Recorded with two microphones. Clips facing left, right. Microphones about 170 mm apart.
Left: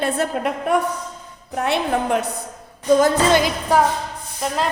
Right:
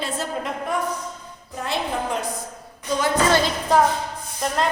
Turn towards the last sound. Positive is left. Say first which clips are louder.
# left 1 dB
turn(degrees=0)  # may be behind; listen again after turning